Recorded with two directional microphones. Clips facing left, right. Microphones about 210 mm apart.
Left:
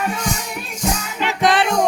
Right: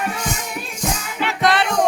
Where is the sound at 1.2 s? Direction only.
20° left (ahead or behind).